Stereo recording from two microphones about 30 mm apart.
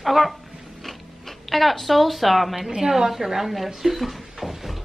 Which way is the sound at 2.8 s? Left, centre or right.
Centre.